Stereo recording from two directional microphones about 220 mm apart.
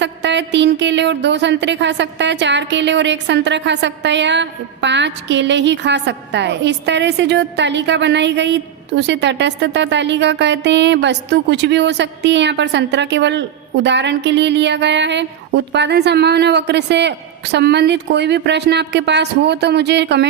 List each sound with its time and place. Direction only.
0.0 s speech: 55° right (ahead or behind)